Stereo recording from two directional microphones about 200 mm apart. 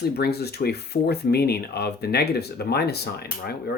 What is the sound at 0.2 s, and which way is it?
Speech, 55° left (ahead or behind).